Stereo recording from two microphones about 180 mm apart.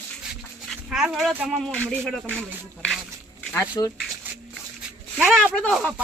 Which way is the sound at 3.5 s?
20° left (ahead or behind).